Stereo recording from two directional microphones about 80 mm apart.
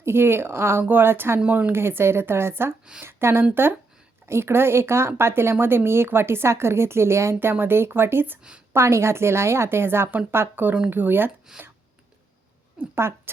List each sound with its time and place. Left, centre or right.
0.0 s speech: right
1.4 s speech: centre
1.7 s speech: right
11.5 s speech: centre
13.0 s speech: right